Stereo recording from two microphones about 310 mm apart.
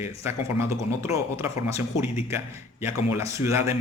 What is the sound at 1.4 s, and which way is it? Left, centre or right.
Speech, centre.